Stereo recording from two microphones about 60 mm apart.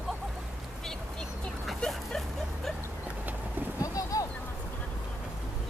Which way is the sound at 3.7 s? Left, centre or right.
Left.